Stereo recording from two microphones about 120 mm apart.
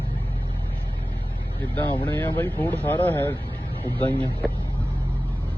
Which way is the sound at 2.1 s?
15° left (ahead or behind).